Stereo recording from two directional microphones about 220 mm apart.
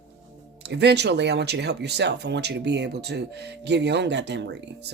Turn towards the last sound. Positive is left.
turn(degrees=-50)  # may be behind; listen again after turning